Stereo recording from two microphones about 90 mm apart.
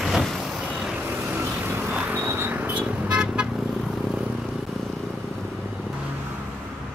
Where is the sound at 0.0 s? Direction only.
Centre (ahead or behind).